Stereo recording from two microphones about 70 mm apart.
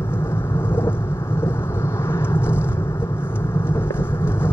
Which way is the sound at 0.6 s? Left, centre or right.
Left.